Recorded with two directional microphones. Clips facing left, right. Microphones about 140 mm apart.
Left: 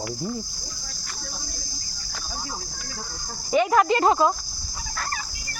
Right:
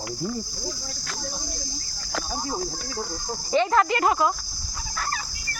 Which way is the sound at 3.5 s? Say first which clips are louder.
Left 2 dB; 10° left (ahead or behind).